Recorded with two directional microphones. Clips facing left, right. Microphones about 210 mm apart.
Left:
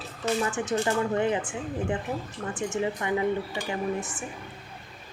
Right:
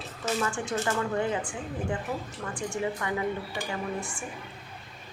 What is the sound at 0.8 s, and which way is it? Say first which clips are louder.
Speech: left 2 dB; 20° left (ahead or behind).